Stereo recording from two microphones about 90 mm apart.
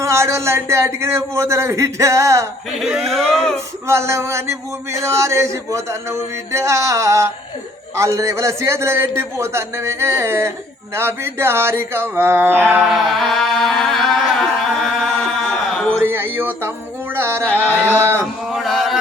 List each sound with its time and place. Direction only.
0.0 s speech: 30° right (ahead or behind)
2.7 s speech: 5° right (ahead or behind)
3.8 s a man's voice: 30° right (ahead or behind)
12.8 s chant: centre (ahead or behind)
16.0 s a sound: 25° right (ahead or behind)
17.2 s singing: 25° right (ahead or behind)
17.5 s a sound: 15° left (ahead or behind)
17.7 s a sound: 20° right (ahead or behind)
18.5 s chant: centre (ahead or behind)